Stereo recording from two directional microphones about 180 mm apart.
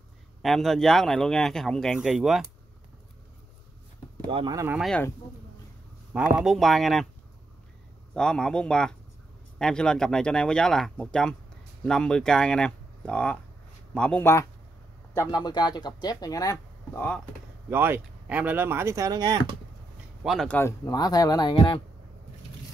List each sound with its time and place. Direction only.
0.4 s speech: centre (ahead or behind)
4.3 s speech: 30° right (ahead or behind)
4.7 s speech: centre (ahead or behind)
6.1 s speech: 5° right (ahead or behind)
8.1 s speech: 5° left (ahead or behind)
15.1 s speech: 20° left (ahead or behind)
17.6 s speech: 10° right (ahead or behind)
20.2 s speech: 5° left (ahead or behind); by 21.8 s 25° left (ahead or behind)